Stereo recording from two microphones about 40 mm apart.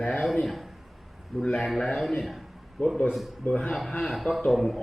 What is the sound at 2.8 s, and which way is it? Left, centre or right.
Speech, left.